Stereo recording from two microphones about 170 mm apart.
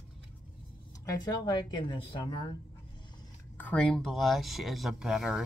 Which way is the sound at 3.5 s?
10° left (ahead or behind).